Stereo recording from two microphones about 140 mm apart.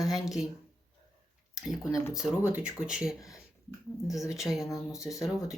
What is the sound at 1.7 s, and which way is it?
Speech, 5° right (ahead or behind).